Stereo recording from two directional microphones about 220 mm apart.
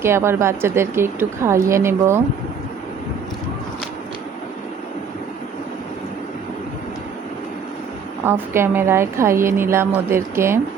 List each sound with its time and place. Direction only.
0.0 s a woman's voice: 10° right (ahead or behind)
8.2 s a woman's voice: 10° right (ahead or behind)